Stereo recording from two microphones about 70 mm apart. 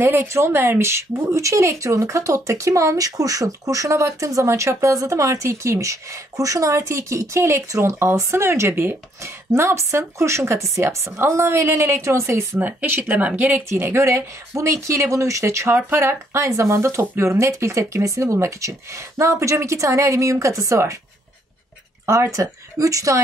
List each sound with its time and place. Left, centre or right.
0.0 s speech: right
12.5 s speech: right
22.0 s speech: right